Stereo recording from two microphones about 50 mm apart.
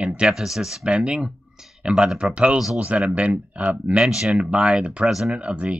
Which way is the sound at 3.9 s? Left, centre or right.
Centre.